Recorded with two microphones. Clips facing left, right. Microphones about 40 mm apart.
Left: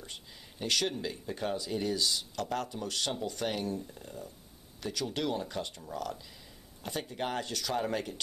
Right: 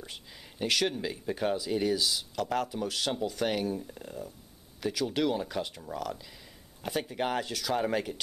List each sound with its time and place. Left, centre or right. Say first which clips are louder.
0.7 s speech: right 3 dB; centre
0.9 s speech: right 4 dB; centre